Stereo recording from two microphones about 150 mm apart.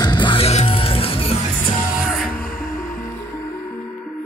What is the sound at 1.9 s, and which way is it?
Music, centre (ahead or behind).